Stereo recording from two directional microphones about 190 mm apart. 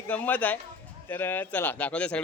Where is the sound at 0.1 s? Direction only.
10° left (ahead or behind).